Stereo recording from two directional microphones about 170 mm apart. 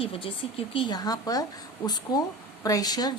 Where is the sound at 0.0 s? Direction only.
35° left (ahead or behind).